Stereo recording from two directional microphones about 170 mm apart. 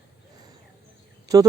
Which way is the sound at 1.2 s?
20° right (ahead or behind).